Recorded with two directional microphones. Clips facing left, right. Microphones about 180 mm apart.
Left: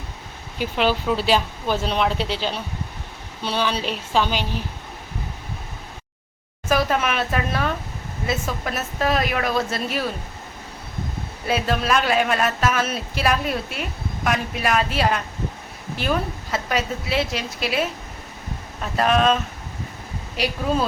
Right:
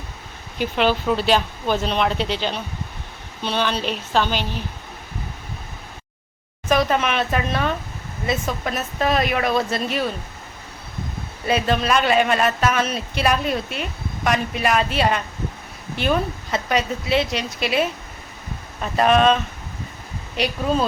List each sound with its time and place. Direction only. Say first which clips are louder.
0.8 s speech: right 1 dB; 5° left (ahead or behind)
6.7 s speech: right 2 dB; 5° left (ahead or behind)
11.4 s speech: right 2 dB; centre (ahead or behind)